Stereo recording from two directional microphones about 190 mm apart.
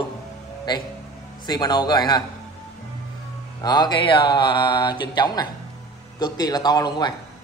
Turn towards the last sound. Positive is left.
turn(degrees=20)  # may be behind; listen again after turning